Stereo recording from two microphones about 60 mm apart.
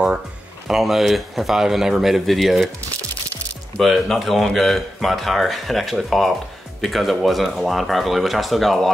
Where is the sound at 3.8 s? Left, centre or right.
Centre.